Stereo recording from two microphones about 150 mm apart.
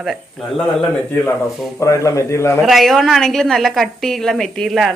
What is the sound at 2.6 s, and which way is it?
A woman's voice, centre (ahead or behind).